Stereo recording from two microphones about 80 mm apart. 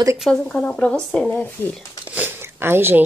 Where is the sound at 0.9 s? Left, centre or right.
Centre.